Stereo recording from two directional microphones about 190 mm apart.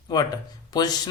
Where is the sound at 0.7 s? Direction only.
20° left (ahead or behind).